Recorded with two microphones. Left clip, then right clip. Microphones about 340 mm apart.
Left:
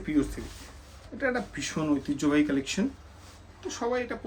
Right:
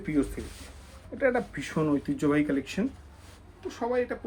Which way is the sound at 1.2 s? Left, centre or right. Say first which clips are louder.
Right 3 dB; centre.